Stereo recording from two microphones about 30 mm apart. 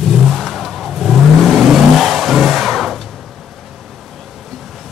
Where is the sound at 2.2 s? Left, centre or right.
Centre.